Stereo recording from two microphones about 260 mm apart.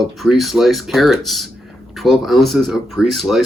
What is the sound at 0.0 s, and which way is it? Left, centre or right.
Speech, centre.